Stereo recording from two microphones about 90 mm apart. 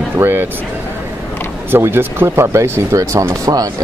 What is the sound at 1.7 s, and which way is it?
Speech, 25° right (ahead or behind).